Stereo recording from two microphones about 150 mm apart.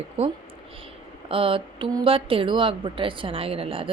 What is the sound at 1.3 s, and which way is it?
A woman's voice, 35° right (ahead or behind).